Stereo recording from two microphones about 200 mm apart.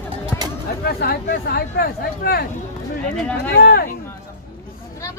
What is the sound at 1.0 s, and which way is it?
Speech, 50° left (ahead or behind).